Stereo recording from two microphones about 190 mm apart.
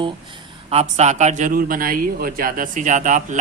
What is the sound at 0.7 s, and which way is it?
Speech, 35° right (ahead or behind).